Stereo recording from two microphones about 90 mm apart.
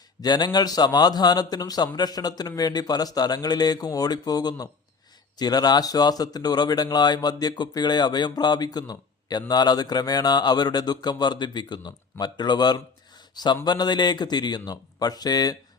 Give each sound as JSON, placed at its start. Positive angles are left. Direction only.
{"t": 0.2, "sound": "speech", "side_deg": 50}